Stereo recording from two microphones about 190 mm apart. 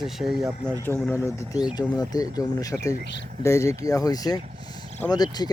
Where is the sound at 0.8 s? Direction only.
10° left (ahead or behind).